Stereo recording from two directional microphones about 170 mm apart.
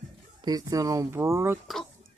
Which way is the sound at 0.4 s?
20° right (ahead or behind).